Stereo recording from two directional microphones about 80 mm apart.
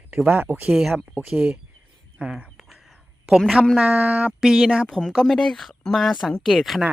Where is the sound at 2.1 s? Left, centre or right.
Centre.